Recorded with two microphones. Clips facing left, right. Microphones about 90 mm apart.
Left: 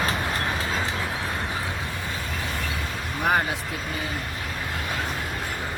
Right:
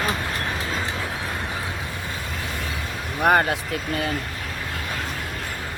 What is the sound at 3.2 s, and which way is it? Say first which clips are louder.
Speech: right 5 dB; 60° right (ahead or behind).